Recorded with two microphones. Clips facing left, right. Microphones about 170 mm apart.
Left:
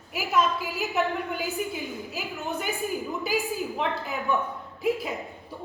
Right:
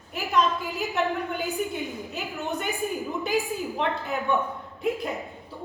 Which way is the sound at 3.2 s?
Centre (ahead or behind).